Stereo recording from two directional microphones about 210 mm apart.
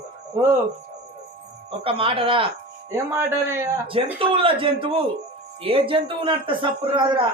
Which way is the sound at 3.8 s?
25° right (ahead or behind).